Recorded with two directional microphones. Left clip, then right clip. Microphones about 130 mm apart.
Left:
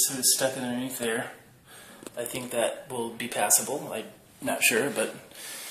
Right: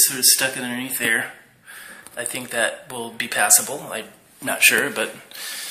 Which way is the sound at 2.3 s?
15° left (ahead or behind).